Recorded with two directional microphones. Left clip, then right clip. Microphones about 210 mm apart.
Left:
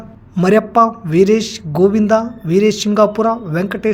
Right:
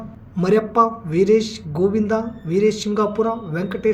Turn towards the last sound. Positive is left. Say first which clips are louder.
# left 3 dB
turn(degrees=45)  # may be behind; listen again after turning